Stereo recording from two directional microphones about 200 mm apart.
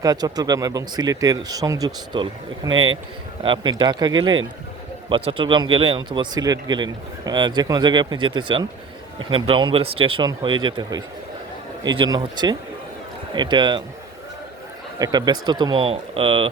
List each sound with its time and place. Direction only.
0.0 s speech: 20° right (ahead or behind)
14.9 s speech: 20° right (ahead or behind)